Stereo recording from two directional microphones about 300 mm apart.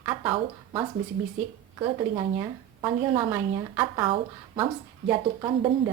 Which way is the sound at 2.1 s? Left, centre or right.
Centre.